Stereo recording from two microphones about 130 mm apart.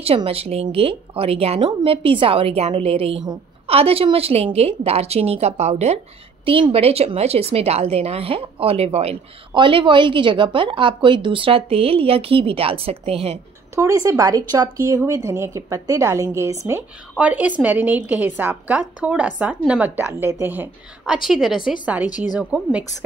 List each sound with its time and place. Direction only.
0.0 s a woman's voice: 45° right (ahead or behind)
6.4 s a woman's voice: 45° right (ahead or behind)
9.5 s a woman's voice: 40° right (ahead or behind)
13.7 s a woman's voice: 25° right (ahead or behind)
17.2 s a woman's voice: 10° right (ahead or behind)
21.1 s a woman's voice: 5° right (ahead or behind)